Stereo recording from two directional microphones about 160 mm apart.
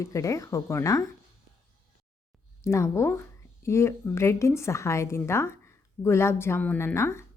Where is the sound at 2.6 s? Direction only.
15° left (ahead or behind).